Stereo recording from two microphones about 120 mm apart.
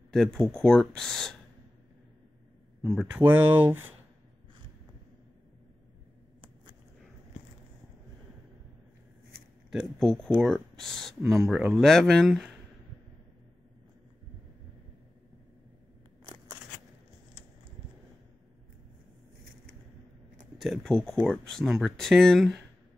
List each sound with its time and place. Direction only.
0.1 s speech: 5° left (ahead or behind)
2.8 s speech: centre (ahead or behind)
3.2 s speech: 15° right (ahead or behind)
9.7 s speech: centre (ahead or behind)
20.5 s speech: centre (ahead or behind)